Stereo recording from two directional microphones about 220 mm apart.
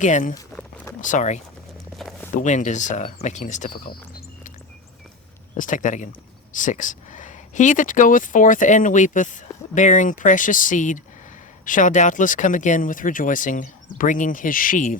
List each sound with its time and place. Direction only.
0.0 s speech: 35° left (ahead or behind)
0.3 s a sound: 10° left (ahead or behind)
1.0 s speech: 35° left (ahead or behind)
2.0 s a sound: centre (ahead or behind)
2.3 s speech: 35° left (ahead or behind)
5.5 s speech: 35° left (ahead or behind)